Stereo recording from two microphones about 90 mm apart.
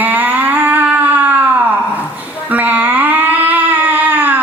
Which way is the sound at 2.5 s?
20° right (ahead or behind).